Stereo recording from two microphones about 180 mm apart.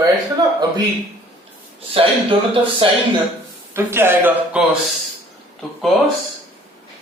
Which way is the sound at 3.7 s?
15° right (ahead or behind).